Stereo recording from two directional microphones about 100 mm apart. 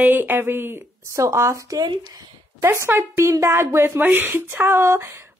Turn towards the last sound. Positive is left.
turn(degrees=-25)  # may be behind; listen again after turning